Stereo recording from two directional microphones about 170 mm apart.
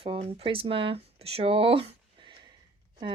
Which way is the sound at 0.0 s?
35° right (ahead or behind).